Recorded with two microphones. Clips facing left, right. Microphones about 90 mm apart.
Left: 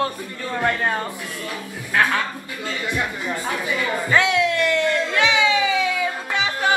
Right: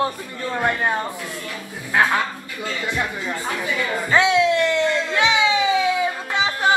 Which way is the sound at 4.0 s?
20° right (ahead or behind).